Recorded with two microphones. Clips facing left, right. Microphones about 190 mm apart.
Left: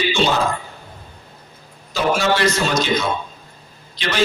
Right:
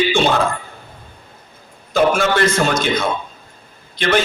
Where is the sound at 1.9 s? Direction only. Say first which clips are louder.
Right 3 dB; 55° right (ahead or behind).